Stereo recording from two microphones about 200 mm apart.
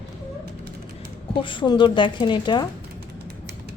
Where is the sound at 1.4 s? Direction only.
25° left (ahead or behind).